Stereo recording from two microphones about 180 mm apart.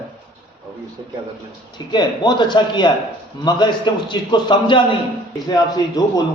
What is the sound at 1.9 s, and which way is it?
A man's voice, 25° left (ahead or behind).